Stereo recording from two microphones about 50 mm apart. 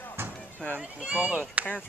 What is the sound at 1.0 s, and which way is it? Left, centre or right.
Speech, right.